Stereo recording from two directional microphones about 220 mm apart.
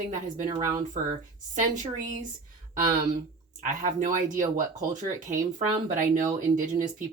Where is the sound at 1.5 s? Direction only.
35° right (ahead or behind).